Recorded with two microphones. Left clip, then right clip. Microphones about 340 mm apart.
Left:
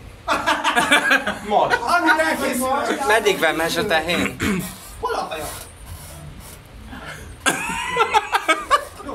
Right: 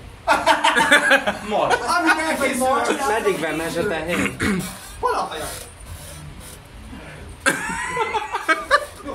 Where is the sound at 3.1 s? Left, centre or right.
Left.